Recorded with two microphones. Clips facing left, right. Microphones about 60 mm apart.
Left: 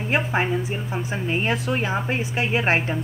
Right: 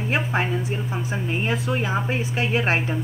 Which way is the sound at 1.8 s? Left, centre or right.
Centre.